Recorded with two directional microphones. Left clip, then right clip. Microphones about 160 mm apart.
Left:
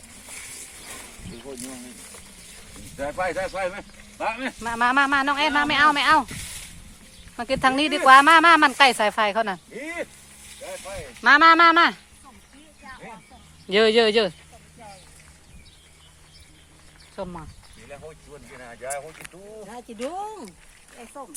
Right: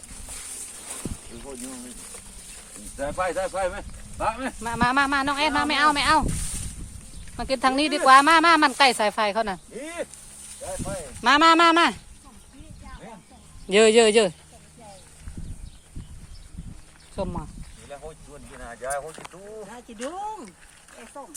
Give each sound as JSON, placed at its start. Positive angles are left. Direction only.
{"t": 0.4, "sound": "a sound", "side_deg": -20}
{"t": 3.0, "sound": "speech", "side_deg": 0}
{"t": 4.2, "sound": "a man's voice", "side_deg": -20}
{"t": 4.6, "sound": "speech", "side_deg": 10}
{"t": 7.3, "sound": "speech", "side_deg": 10}
{"t": 9.7, "sound": "speech", "side_deg": -15}
{"t": 10.6, "sound": "speech", "side_deg": -30}
{"t": 13.7, "sound": "a man's voice", "side_deg": -25}
{"t": 17.4, "sound": "a sound", "side_deg": -10}
{"t": 18.6, "sound": "speech", "side_deg": 5}
{"t": 21.2, "sound": "speech", "side_deg": 60}